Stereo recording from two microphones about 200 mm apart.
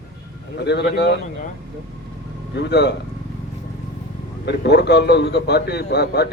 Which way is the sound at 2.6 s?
60° left (ahead or behind).